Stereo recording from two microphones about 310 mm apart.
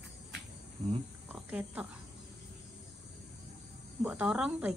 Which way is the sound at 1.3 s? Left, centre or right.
Centre.